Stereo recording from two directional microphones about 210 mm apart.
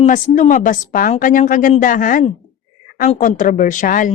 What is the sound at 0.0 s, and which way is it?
Speech, 35° left (ahead or behind).